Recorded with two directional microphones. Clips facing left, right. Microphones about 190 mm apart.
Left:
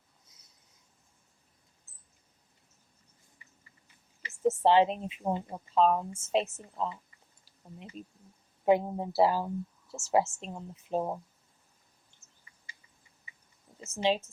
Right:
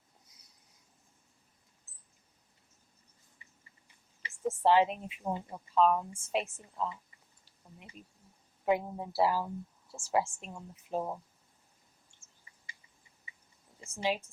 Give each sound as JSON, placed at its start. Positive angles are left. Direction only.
{"t": 0.3, "sound": "a sound", "side_deg": 25}
{"t": 4.6, "sound": "speech", "side_deg": 25}
{"t": 13.8, "sound": "speech", "side_deg": 25}